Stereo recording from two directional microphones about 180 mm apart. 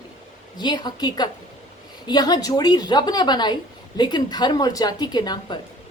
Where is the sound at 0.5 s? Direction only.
25° left (ahead or behind).